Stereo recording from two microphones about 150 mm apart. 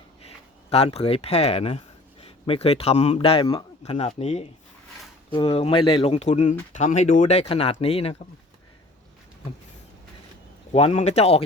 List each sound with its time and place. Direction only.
0.7 s speech: 45° left (ahead or behind)
10.7 s speech: 45° left (ahead or behind)